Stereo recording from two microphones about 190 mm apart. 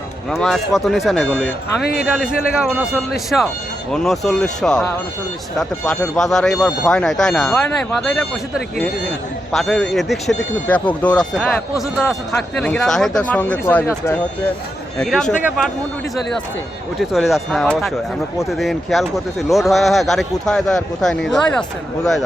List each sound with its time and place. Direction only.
0.3 s speech: centre (ahead or behind)
1.8 s a man's voice: 55° left (ahead or behind)
2.0 s speech: 5° right (ahead or behind)
17.0 s speech: centre (ahead or behind)